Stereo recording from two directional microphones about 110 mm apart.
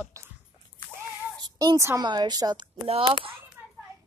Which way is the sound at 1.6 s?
30° right (ahead or behind).